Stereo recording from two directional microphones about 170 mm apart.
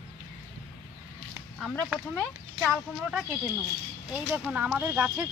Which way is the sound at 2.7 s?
5° right (ahead or behind).